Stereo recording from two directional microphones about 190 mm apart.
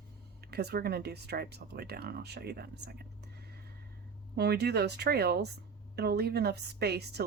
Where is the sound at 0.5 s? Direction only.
55° right (ahead or behind).